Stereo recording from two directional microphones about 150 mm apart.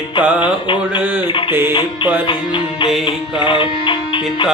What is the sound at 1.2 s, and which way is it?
Music, 30° left (ahead or behind).